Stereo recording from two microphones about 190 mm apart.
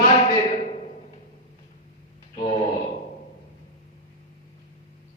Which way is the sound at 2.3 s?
40° left (ahead or behind).